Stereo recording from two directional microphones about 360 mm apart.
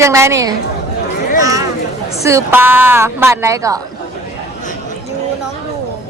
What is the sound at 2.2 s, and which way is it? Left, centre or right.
A woman's voice, centre.